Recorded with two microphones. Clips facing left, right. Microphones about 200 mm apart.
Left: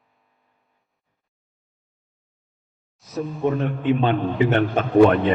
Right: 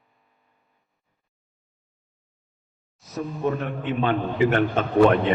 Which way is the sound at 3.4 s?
20° left (ahead or behind).